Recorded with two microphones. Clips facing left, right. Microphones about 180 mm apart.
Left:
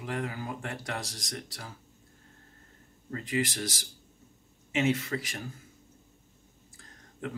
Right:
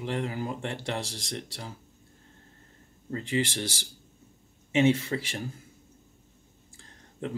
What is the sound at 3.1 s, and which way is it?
Speech, 30° right (ahead or behind).